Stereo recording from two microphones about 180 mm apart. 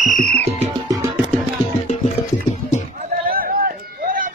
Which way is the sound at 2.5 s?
40° left (ahead or behind).